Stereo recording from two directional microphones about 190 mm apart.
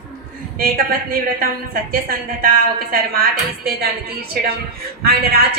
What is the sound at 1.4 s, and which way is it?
A woman's voice, 50° right (ahead or behind).